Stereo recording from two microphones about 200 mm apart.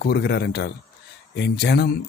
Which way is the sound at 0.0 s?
55° left (ahead or behind).